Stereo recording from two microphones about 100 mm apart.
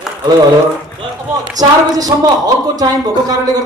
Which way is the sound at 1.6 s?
40° right (ahead or behind).